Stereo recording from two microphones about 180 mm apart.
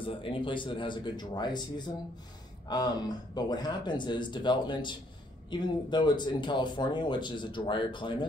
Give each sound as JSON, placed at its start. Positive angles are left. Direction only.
{"t": 0.0, "sound": "speech", "side_deg": 30}
{"t": 2.7, "sound": "speech", "side_deg": 20}